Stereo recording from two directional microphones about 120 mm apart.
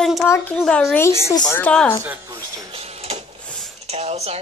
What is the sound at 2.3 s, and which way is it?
Music, 25° right (ahead or behind).